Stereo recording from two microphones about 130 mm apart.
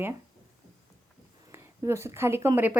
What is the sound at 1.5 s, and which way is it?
A woman's voice, 20° right (ahead or behind).